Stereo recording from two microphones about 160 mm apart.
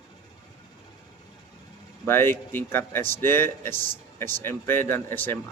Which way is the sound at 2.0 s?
15° left (ahead or behind).